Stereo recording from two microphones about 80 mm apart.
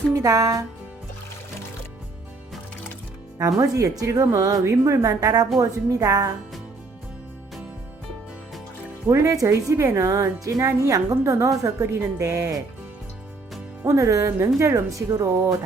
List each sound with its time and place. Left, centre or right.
0.1 s speech: right
3.3 s speech: right
9.0 s speech: right
13.8 s speech: right